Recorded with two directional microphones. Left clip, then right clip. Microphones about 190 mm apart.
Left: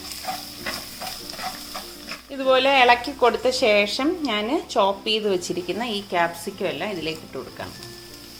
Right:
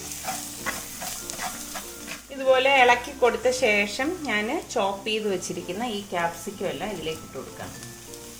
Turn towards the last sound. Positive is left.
turn(degrees=45)  # may be behind; listen again after turning